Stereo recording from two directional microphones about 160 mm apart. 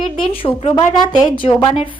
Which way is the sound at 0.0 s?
35° left (ahead or behind).